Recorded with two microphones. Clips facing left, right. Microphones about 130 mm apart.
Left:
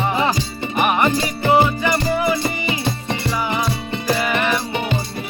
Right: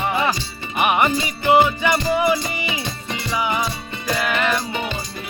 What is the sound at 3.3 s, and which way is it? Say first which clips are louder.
Music: right 1 dB; centre (ahead or behind).